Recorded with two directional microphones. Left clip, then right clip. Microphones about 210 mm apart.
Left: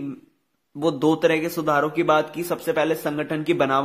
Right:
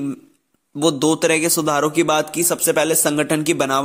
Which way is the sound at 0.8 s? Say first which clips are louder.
Right 3 dB; 20° right (ahead or behind).